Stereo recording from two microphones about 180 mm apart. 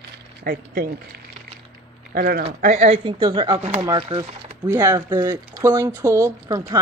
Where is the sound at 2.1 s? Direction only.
55° right (ahead or behind).